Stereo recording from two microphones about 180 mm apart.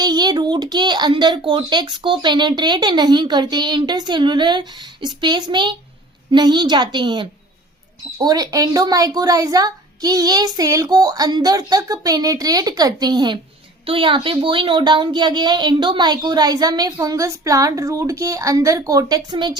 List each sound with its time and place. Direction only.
0.0 s a child's voice: 25° right (ahead or behind)